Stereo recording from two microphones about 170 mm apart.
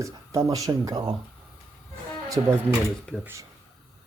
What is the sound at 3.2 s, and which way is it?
Speech, 15° right (ahead or behind).